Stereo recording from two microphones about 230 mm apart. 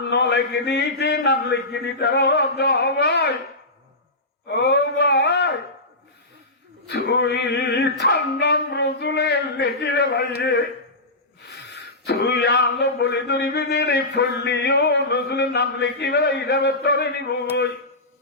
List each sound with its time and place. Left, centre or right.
0.1 s speech: left
4.4 s a sound: left
6.8 s speech: left
11.4 s speech: left